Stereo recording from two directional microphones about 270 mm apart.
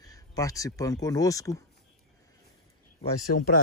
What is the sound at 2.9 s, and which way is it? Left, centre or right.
Speech, left.